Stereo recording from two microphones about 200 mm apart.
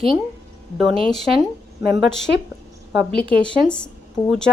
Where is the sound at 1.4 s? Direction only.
15° right (ahead or behind).